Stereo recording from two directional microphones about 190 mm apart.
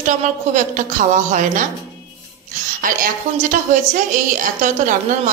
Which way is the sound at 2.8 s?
45° right (ahead or behind).